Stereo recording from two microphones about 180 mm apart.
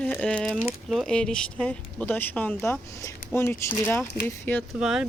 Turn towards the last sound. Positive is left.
turn(degrees=-5)  # may be behind; listen again after turning